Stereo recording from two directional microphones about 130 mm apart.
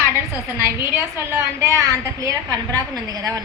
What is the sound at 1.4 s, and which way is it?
A woman's voice, 25° right (ahead or behind).